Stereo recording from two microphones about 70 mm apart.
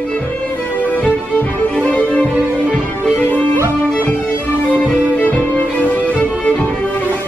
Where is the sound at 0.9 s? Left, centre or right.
Left.